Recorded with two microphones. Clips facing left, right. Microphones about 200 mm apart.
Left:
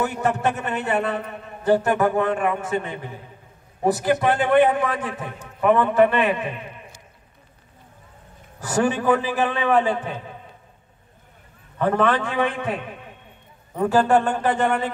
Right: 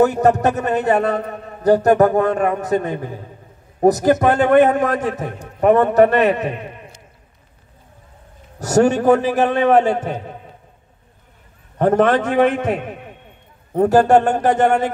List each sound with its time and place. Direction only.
0.0 s a man's voice: 40° right (ahead or behind)
8.6 s a man's voice: 45° right (ahead or behind)
11.8 s a man's voice: 45° right (ahead or behind)